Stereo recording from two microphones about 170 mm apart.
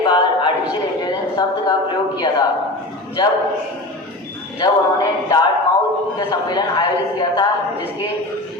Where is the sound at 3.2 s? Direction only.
25° left (ahead or behind).